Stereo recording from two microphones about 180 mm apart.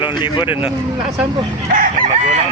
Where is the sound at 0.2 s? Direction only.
30° left (ahead or behind).